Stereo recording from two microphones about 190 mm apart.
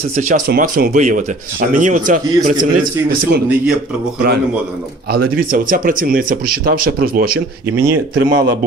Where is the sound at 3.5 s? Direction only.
5° right (ahead or behind).